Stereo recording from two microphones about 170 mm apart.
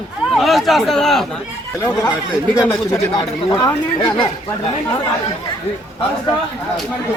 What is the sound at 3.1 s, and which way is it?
Speech, 20° left (ahead or behind).